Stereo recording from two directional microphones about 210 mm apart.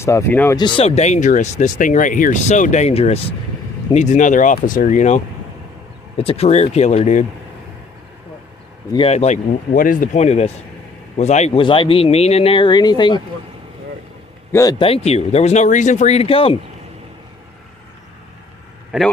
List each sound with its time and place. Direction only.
0.0 s speech: 15° left (ahead or behind)
0.6 s speech: 25° left (ahead or behind)
8.9 s speech: 25° left (ahead or behind)
14.5 s speech: 15° left (ahead or behind)
18.9 s a man's voice: centre (ahead or behind)